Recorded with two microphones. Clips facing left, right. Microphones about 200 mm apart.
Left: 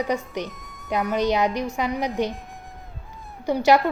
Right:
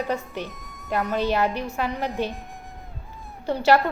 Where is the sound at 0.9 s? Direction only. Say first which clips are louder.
Left 2 dB; 15° left (ahead or behind).